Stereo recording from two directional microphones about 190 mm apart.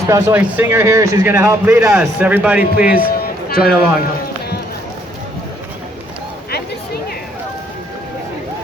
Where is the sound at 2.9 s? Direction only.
50° left (ahead or behind).